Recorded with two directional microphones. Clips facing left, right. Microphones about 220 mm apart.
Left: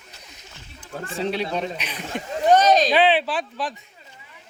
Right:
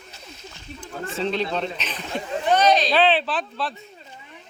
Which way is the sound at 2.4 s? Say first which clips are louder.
Left 3 dB; 45° left (ahead or behind).